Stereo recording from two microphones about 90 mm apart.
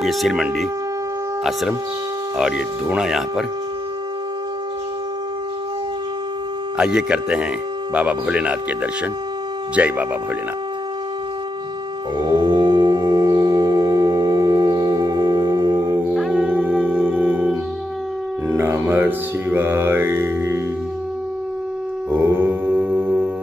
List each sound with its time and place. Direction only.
0.0 s speech: 5° right (ahead or behind)
6.8 s speech: 10° right (ahead or behind)
9.8 s speech: 15° right (ahead or behind)
12.2 s music: 55° right (ahead or behind)
16.3 s music: 20° right (ahead or behind)
18.5 s mantra: 25° right (ahead or behind)
22.1 s a sound: 25° right (ahead or behind)
22.7 s music: 10° right (ahead or behind)